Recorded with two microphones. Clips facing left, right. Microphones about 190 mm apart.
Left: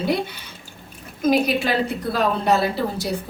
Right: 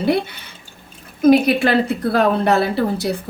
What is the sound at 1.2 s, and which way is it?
A woman's voice, 60° right (ahead or behind).